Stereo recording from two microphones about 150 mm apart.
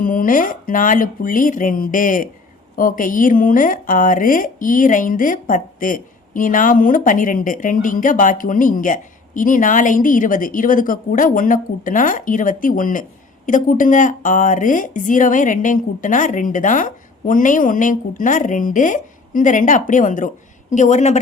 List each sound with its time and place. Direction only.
0.0 s speech: 70° left (ahead or behind); by 21.2 s 50° left (ahead or behind)